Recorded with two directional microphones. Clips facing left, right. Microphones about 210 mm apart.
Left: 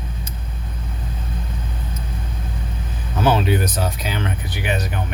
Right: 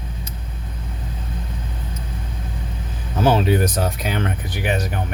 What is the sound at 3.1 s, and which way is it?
Speech, 40° right (ahead or behind).